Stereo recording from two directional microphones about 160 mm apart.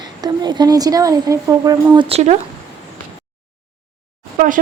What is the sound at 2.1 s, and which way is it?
Speech, 45° right (ahead or behind).